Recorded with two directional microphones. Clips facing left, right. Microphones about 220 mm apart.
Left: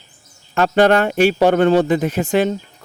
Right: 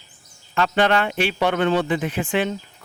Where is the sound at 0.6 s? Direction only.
45° left (ahead or behind).